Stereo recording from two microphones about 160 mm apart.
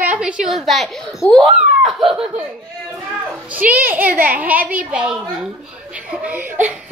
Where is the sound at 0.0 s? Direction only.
10° right (ahead or behind).